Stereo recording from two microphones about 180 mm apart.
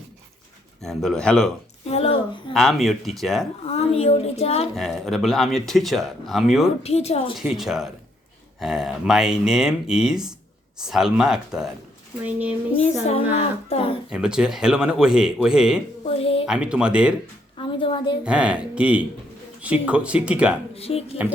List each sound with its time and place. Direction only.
0.8 s speech: centre (ahead or behind)
1.9 s a woman's voice: 35° left (ahead or behind)
2.5 s speech: centre (ahead or behind)
3.7 s a woman's voice: 35° left (ahead or behind)
4.7 s speech: centre (ahead or behind)
6.8 s a woman's voice: 35° left (ahead or behind)
7.3 s speech: centre (ahead or behind)
12.8 s a woman's voice: 35° left (ahead or behind)
14.1 s speech: 5° right (ahead or behind)
16.0 s a woman's voice: 30° left (ahead or behind)
16.5 s speech: 5° right (ahead or behind)
17.6 s a woman's voice: 30° left (ahead or behind)
18.3 s speech: 5° right (ahead or behind)
20.7 s a woman's voice: 35° left (ahead or behind)